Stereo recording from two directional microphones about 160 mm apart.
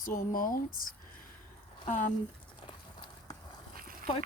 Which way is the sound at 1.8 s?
55° left (ahead or behind).